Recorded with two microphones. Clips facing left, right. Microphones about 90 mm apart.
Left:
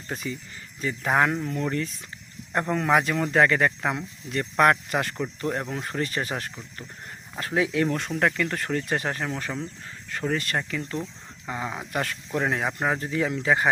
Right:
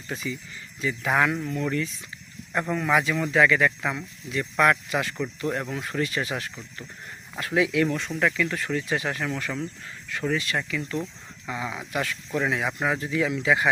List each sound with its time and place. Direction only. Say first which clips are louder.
0.1 s speech: even; 45° left (ahead or behind)
2.5 s speech: left 1 dB; 40° left (ahead or behind)
5.1 s speech: even; 35° left (ahead or behind)
7.9 s speech: even; 50° left (ahead or behind); by 9.6 s 30° left (ahead or behind)
10.1 s speech: even; 40° left (ahead or behind)